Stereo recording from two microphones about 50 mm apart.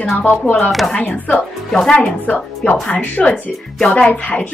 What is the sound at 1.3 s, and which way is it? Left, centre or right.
Speech, centre.